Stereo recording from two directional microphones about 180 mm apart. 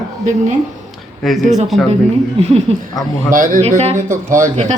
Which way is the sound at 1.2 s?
Centre (ahead or behind).